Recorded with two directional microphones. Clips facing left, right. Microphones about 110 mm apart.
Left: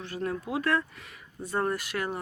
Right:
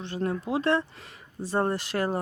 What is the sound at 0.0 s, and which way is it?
Speech, 25° right (ahead or behind).